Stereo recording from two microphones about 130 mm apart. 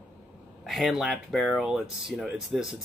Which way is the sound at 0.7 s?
Centre (ahead or behind).